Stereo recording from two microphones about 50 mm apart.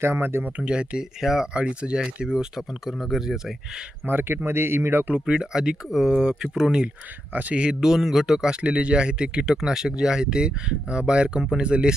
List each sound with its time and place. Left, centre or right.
0.0 s speech: right
0.6 s speech: centre
1.2 s speech: centre
1.5 s speech: centre
4.0 s speech: right
4.4 s speech: right
5.1 s speech: centre
7.3 s speech: right
7.6 s speech: centre
8.6 s speech: right